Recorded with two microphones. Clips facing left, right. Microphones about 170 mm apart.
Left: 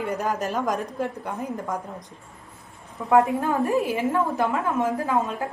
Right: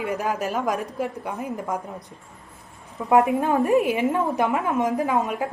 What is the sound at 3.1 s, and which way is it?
A woman's voice, 15° right (ahead or behind).